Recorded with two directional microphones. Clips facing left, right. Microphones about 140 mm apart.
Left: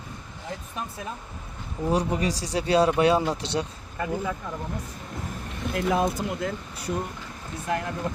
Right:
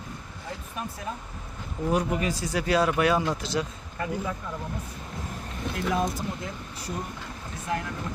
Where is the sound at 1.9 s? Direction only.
30° left (ahead or behind).